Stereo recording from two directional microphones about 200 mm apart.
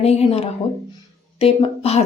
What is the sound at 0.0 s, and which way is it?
Speech, 30° left (ahead or behind).